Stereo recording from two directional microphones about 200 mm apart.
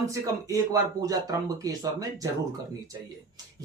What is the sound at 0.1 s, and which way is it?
Speech, 15° right (ahead or behind).